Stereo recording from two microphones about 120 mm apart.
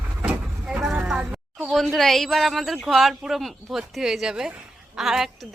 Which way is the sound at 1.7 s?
Centre (ahead or behind).